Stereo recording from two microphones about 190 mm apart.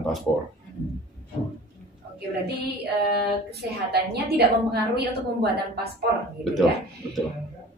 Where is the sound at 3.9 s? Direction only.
60° right (ahead or behind).